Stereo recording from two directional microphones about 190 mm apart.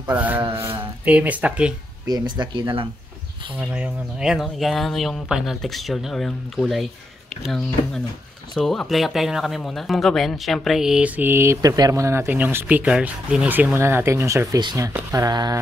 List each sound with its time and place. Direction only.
0.1 s speech: 10° right (ahead or behind)
2.0 s speech: 20° right (ahead or behind)
3.5 s speech: 5° right (ahead or behind)